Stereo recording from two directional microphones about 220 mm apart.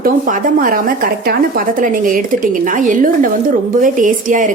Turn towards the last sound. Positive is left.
turn(degrees=-35)  # may be behind; listen again after turning